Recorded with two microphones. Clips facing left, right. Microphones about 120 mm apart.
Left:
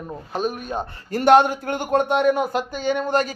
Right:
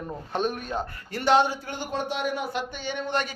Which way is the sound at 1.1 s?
50° left (ahead or behind).